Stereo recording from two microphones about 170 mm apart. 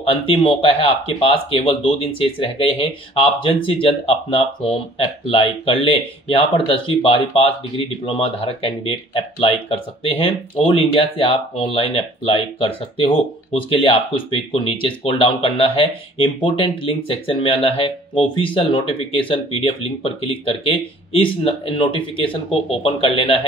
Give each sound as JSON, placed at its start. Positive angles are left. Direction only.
{"t": 0.1, "sound": "speech", "side_deg": 30}